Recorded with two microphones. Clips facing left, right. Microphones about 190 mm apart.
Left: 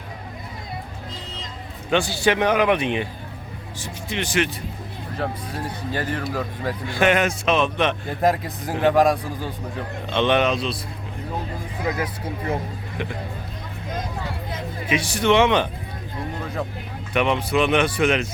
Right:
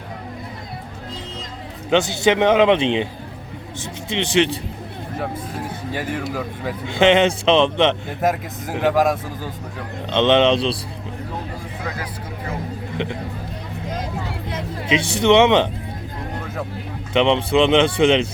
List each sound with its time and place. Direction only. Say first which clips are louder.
1.9 s speech: right 3 dB; 20° right (ahead or behind)
4.1 s speech: right 5 dB; 25° right (ahead or behind)
5.9 s speech: right 1 dB; 10° right (ahead or behind)
6.8 s speech: right 5 dB; 25° right (ahead or behind)
8.2 s speech: left 1 dB; 5° right (ahead or behind)
10.1 s speech: right 4 dB; 20° right (ahead or behind)
13.0 s speech: right 4 dB; 20° right (ahead or behind)
14.9 s speech: right 4 dB; 25° right (ahead or behind)
17.2 s speech: right 4 dB; 25° right (ahead or behind)